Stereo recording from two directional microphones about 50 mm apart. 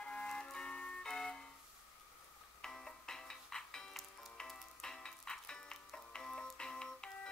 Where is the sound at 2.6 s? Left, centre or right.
Centre.